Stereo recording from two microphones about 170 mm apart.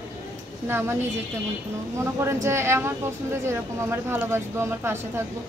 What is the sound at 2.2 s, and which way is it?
Speech, 15° right (ahead or behind).